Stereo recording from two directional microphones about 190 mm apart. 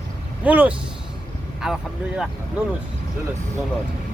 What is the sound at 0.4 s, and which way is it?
Speech, 10° right (ahead or behind).